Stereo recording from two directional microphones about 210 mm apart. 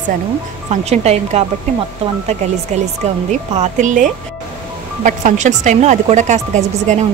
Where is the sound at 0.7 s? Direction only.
30° right (ahead or behind).